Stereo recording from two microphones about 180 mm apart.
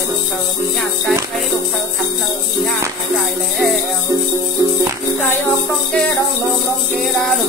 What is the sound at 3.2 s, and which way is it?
Music, centre (ahead or behind).